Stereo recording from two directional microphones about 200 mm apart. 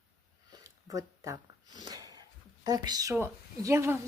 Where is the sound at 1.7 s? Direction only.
20° right (ahead or behind).